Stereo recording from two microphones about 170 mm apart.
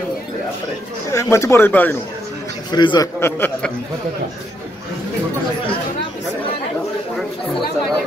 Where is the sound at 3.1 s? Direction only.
15° left (ahead or behind).